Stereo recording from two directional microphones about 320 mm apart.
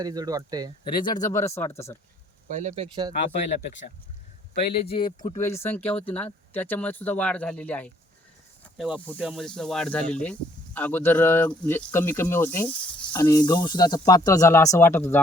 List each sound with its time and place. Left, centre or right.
0.0 s speech: centre
0.9 s speech: centre
2.6 s speech: centre
4.5 s speech: centre